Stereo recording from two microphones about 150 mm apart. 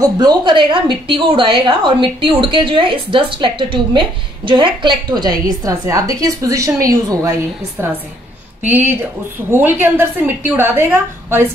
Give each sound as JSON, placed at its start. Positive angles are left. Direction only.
{"t": 0.0, "sound": "a woman's voice", "side_deg": -30}
{"t": 8.6, "sound": "a woman's voice", "side_deg": -10}